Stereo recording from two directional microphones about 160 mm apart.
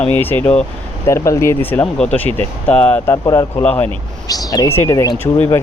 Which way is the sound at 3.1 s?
20° left (ahead or behind).